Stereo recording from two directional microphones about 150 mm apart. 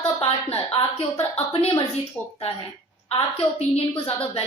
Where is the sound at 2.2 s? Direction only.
10° left (ahead or behind).